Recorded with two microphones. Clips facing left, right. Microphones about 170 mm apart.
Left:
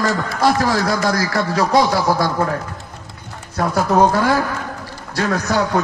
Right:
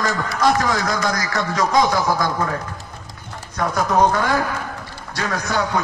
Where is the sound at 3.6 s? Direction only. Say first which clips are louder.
Left 3 dB; 35° left (ahead or behind).